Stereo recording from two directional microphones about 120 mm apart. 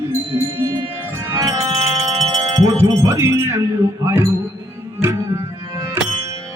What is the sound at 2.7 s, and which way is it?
Music, 25° right (ahead or behind).